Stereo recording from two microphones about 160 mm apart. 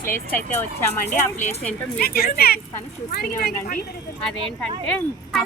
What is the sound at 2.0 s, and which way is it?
Speech, 70° left (ahead or behind).